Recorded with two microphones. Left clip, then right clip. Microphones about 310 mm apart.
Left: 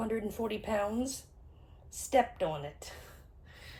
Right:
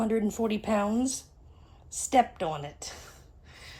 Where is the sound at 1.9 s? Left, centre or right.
Right.